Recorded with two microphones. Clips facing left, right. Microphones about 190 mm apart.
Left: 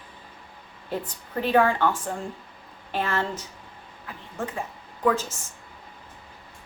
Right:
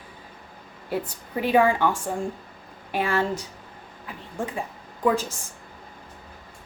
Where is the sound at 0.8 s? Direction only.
10° right (ahead or behind).